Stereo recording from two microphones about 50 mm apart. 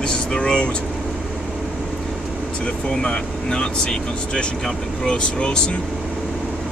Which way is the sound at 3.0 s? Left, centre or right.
Centre.